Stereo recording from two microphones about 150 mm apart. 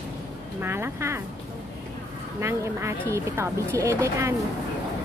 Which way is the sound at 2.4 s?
15° right (ahead or behind).